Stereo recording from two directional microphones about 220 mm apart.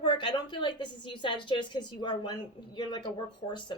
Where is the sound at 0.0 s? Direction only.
20° left (ahead or behind).